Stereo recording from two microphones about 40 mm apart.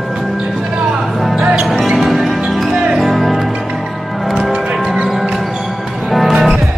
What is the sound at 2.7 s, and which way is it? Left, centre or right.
Music, centre.